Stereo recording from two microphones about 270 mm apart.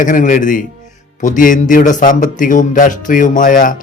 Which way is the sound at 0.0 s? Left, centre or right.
Left.